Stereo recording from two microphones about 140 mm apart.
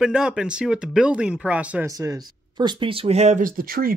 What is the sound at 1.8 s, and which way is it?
Speech, 25° right (ahead or behind).